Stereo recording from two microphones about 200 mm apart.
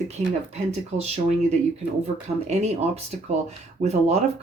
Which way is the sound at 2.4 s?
35° right (ahead or behind).